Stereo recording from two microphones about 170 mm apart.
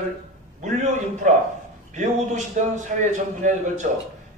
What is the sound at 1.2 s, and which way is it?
A man's voice, 50° right (ahead or behind).